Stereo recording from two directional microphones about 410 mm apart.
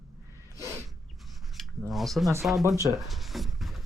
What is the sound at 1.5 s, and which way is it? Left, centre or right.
Speech, centre.